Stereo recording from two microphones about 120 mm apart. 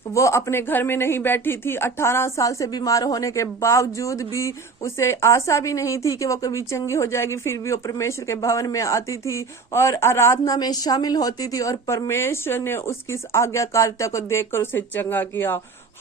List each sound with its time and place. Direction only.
0.1 s speech: 25° left (ahead or behind)